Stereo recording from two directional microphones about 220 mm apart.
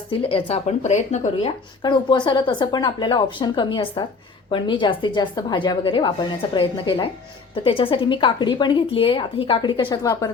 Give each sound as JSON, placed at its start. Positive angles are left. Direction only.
{"t": 0.1, "sound": "speech", "side_deg": 25}